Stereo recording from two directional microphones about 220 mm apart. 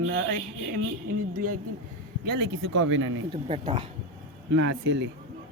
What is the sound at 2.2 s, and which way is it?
Speech, 55° right (ahead or behind).